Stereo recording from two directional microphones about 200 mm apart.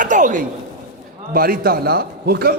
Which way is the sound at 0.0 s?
40° right (ahead or behind).